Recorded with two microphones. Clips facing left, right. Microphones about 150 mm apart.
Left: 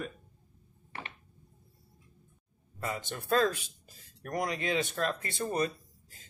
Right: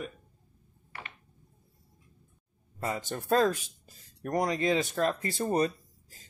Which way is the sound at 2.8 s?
40° right (ahead or behind).